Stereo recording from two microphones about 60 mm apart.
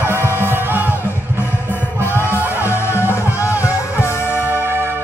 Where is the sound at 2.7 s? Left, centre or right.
Left.